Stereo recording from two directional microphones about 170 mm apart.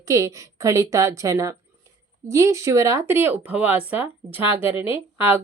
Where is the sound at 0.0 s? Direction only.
20° right (ahead or behind).